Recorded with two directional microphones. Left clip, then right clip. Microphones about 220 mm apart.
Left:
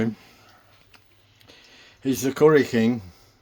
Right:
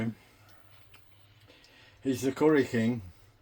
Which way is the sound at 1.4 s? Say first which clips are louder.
Left 8 dB; 55° left (ahead or behind).